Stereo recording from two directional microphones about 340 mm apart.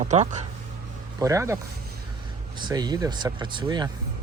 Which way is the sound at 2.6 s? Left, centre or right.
Centre.